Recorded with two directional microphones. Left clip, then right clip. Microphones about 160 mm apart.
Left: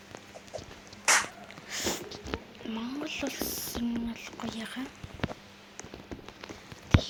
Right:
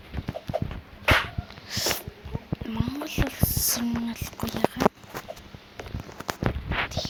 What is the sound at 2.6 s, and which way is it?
Whispering, centre (ahead or behind).